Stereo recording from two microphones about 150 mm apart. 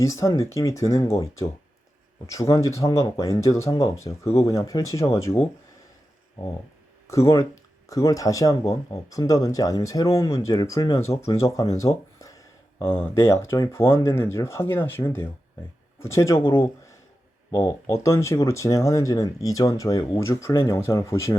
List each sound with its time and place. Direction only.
0.0 s speech: 20° left (ahead or behind)
7.1 s speech: 20° left (ahead or behind)
17.8 s speech: 20° left (ahead or behind)